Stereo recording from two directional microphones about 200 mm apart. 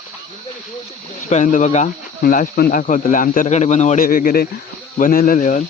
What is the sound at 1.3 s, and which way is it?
Speech, 35° left (ahead or behind).